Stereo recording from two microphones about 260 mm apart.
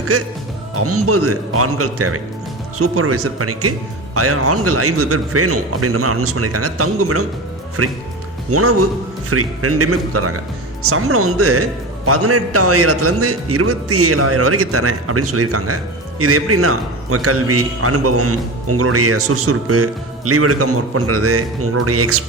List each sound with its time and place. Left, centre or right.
0.1 s a man's voice: right